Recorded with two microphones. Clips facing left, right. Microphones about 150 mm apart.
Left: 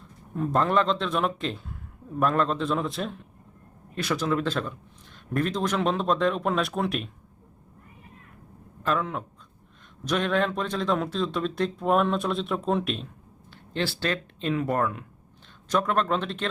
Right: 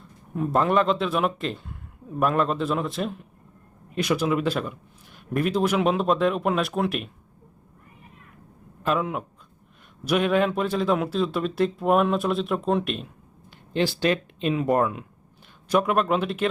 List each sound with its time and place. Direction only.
0.3 s speech: 5° right (ahead or behind)
3.9 s a man's voice: 15° right (ahead or behind)
8.8 s speech: 15° right (ahead or behind)
13.7 s a man's voice: 15° right (ahead or behind)